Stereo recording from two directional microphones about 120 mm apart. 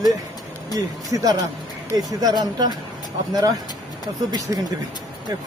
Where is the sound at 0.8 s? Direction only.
30° right (ahead or behind).